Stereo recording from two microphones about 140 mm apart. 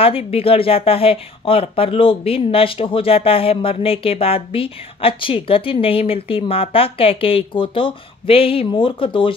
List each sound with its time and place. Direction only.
0.0 s speech: 45° left (ahead or behind)